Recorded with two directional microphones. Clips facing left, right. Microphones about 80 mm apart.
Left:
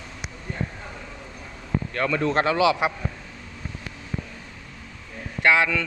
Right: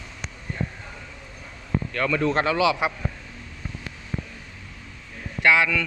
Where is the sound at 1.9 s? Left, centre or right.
Left.